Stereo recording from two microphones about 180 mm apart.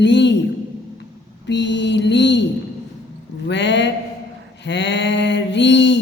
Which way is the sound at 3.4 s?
75° left (ahead or behind).